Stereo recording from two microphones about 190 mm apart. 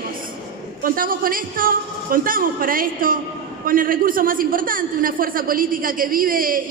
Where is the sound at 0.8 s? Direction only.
50° right (ahead or behind).